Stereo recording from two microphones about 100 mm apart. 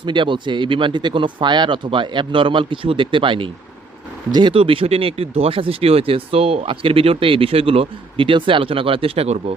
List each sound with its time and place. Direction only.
0.0 s speech: 55° right (ahead or behind)
4.5 s speech: 65° right (ahead or behind); by 9.6 s 85° right